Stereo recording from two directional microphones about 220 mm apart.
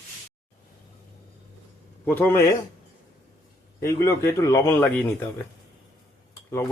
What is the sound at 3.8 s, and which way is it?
Speech, 15° left (ahead or behind).